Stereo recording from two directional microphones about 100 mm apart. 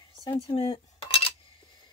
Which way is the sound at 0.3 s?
60° left (ahead or behind).